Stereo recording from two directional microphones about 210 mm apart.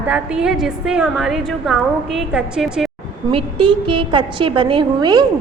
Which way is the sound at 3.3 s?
25° right (ahead or behind).